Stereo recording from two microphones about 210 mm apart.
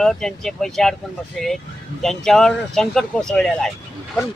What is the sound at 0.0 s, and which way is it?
Speech, centre (ahead or behind).